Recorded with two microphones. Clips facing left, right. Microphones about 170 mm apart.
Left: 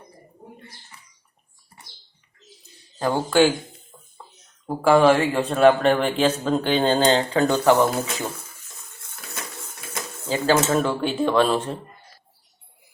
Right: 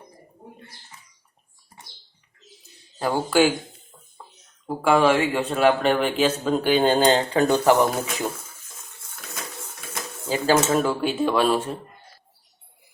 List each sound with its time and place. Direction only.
3.0 s speech: 10° right (ahead or behind)
4.6 s speech: centre (ahead or behind)
10.2 s speech: 15° right (ahead or behind)